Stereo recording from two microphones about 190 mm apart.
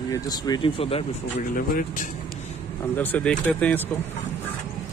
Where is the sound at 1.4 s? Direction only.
45° left (ahead or behind).